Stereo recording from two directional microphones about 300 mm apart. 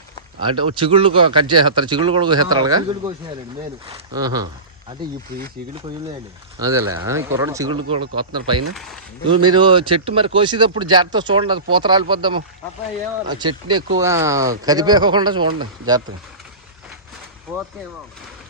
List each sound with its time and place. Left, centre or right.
0.4 s speech: centre
3.8 s speech: centre
6.6 s speech: centre
8.7 s speech: centre
9.2 s speech: centre